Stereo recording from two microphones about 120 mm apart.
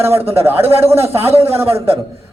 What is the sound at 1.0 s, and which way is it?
Speech, 60° right (ahead or behind).